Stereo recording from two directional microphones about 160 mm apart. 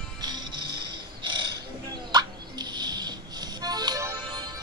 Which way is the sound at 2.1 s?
25° right (ahead or behind).